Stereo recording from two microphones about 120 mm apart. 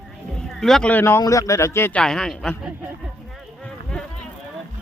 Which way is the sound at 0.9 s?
20° left (ahead or behind).